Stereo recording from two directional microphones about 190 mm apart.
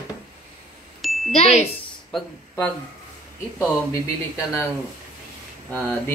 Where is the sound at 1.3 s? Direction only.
35° left (ahead or behind).